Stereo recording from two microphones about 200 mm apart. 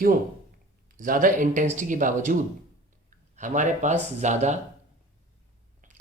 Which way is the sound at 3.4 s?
40° right (ahead or behind).